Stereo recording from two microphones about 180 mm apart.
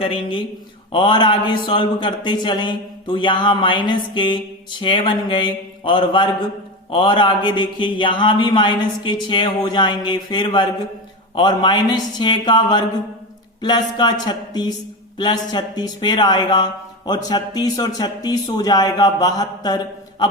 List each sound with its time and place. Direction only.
0.0 s a man's voice: 30° left (ahead or behind)